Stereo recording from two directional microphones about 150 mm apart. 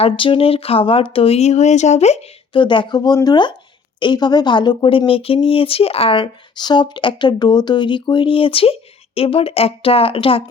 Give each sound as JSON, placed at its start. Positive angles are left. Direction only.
{"t": 0.0, "sound": "speech", "side_deg": 35}
{"t": 2.6, "sound": "speech", "side_deg": 35}